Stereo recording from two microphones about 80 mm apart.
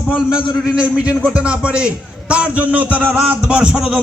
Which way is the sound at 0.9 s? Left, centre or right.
Centre.